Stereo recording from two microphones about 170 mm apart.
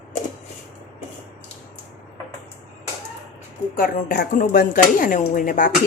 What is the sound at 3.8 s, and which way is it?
Speech, 55° left (ahead or behind).